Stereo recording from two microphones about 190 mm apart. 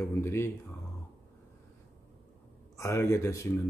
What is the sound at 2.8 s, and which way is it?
Speech, 15° left (ahead or behind).